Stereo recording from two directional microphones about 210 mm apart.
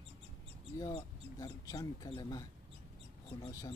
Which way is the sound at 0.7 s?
15° left (ahead or behind).